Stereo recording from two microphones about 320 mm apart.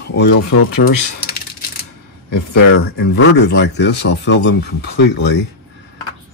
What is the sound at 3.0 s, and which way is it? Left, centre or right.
Speech, left.